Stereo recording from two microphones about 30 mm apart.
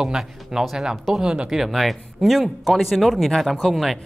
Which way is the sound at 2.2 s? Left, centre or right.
Centre.